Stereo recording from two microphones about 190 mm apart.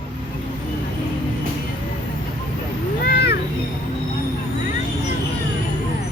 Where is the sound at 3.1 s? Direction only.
55° left (ahead or behind).